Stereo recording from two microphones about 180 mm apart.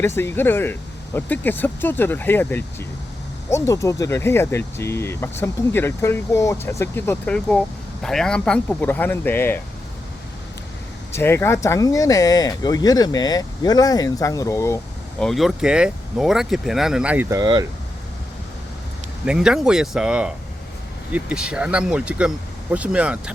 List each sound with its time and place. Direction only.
0.0 s speech: 15° left (ahead or behind)
11.1 s speech: 15° left (ahead or behind)
15.2 s speech: centre (ahead or behind); by 17.7 s 20° right (ahead or behind)
19.2 s speech: 5° right (ahead or behind)